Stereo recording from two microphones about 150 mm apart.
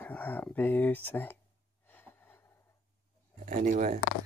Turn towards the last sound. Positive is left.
turn(degrees=-55)  # may be behind; listen again after turning